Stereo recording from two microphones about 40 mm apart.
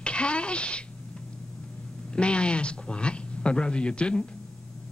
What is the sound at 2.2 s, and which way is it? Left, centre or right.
Speech, left.